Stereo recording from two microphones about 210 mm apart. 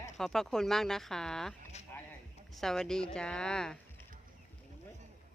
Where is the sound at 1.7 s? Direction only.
30° left (ahead or behind).